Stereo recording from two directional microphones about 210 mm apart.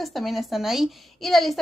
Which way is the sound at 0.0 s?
Centre (ahead or behind).